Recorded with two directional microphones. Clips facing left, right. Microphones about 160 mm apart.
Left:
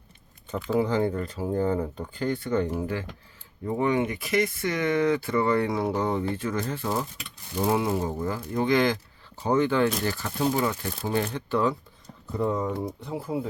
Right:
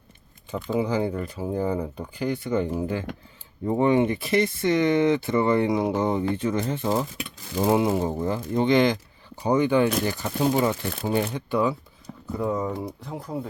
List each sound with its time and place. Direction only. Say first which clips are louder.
0.5 s speech: left 1 dB; centre (ahead or behind)
0.9 s speech: even; 10° right (ahead or behind)
3.7 s speech: right 4 dB; 25° right (ahead or behind); by 13.5 s 5° left (ahead or behind)